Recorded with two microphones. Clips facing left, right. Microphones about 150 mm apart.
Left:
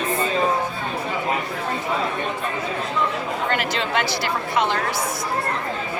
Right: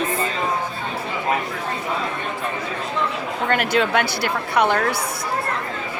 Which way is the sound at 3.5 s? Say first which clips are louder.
Right 6 dB; 55° right (ahead or behind).